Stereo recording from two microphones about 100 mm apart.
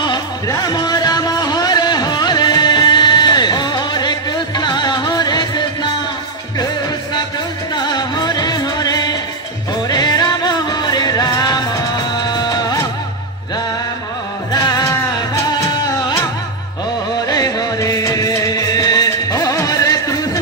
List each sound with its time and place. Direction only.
0.5 s music: 40° left (ahead or behind)
7.7 s music: 45° left (ahead or behind)
14.5 s music: 40° left (ahead or behind)
17.3 s music: 40° left (ahead or behind)